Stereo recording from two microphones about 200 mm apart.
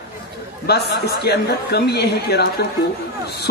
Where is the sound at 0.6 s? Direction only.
55° left (ahead or behind).